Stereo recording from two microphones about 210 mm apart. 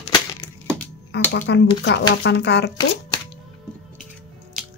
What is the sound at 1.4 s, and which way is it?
Speech, 55° left (ahead or behind).